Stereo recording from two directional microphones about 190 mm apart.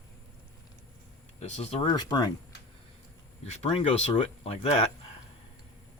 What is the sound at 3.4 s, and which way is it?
Speech, 35° left (ahead or behind).